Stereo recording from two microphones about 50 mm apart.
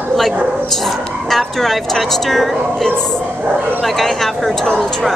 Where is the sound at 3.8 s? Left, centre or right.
Centre.